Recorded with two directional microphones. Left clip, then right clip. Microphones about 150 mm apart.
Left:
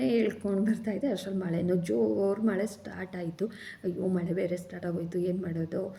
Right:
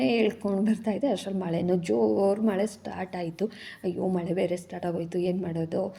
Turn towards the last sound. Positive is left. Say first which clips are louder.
# right 4 dB
turn(degrees=-25)  # may be behind; listen again after turning